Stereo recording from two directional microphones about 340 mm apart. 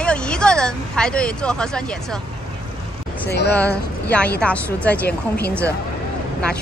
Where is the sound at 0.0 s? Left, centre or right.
Centre.